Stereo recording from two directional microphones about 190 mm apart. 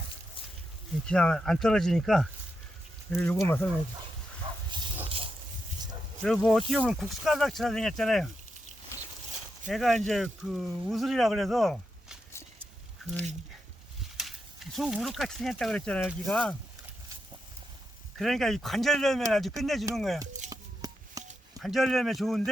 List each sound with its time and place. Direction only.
1.0 s speech: 5° left (ahead or behind)
4.4 s dog: 30° right (ahead or behind)
5.0 s a sound: 30° right (ahead or behind)
6.2 s speech: centre (ahead or behind)
9.6 s speech: centre (ahead or behind)
14.2 s speech: centre (ahead or behind)
18.2 s speech: centre (ahead or behind)
20.5 s a sound: 20° right (ahead or behind)
21.6 s speech: centre (ahead or behind)